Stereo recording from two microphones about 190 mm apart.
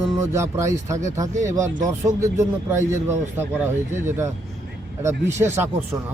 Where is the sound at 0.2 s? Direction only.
15° right (ahead or behind).